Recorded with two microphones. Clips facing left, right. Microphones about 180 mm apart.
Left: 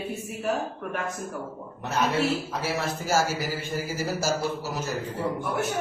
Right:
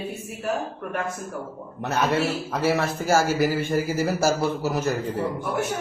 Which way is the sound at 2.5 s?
60° right (ahead or behind).